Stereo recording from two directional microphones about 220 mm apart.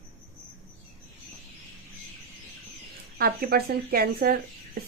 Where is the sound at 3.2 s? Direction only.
45° right (ahead or behind).